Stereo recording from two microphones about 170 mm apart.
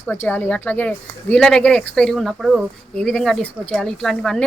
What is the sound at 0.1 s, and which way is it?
A woman's voice, 10° left (ahead or behind).